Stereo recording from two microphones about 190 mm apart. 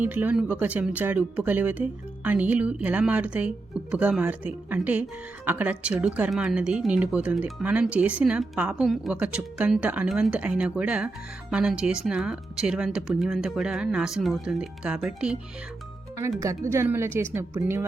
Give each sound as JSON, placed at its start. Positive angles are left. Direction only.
{"t": 0.0, "sound": "speech", "side_deg": -10}
{"t": 16.4, "sound": "speech", "side_deg": -15}